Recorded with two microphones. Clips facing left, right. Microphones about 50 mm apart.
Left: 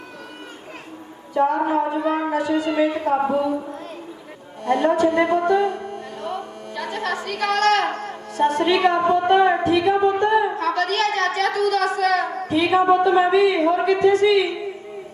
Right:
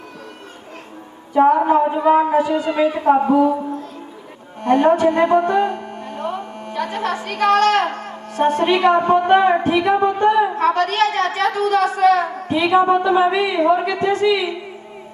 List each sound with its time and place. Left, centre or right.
1.3 s a woman's voice: right
4.6 s a woman's voice: right